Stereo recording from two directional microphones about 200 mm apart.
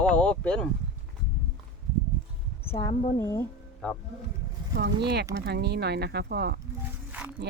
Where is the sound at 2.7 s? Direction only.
30° left (ahead or behind).